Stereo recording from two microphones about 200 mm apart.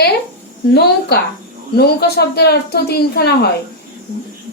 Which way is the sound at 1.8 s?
50° left (ahead or behind).